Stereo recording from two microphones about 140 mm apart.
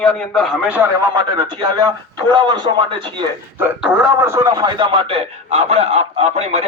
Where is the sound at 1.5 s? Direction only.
30° right (ahead or behind).